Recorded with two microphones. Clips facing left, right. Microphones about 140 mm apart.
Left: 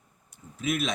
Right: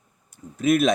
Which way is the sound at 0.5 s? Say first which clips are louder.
Right 10 dB; 40° right (ahead or behind).